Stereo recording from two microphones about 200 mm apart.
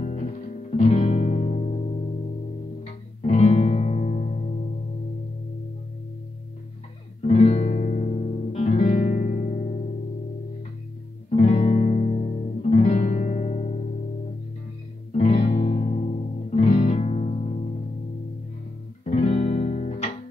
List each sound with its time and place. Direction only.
0.0 s music: 35° left (ahead or behind)
7.2 s music: 35° left (ahead or behind)
11.2 s music: 30° left (ahead or behind)
15.1 s music: 30° left (ahead or behind)
19.0 s music: 35° left (ahead or behind)